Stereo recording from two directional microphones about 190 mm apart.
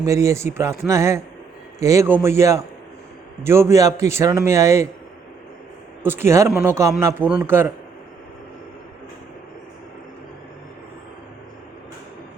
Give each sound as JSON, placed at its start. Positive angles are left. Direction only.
{"t": 0.0, "sound": "a man's voice", "side_deg": -15}
{"t": 6.0, "sound": "a man's voice", "side_deg": -10}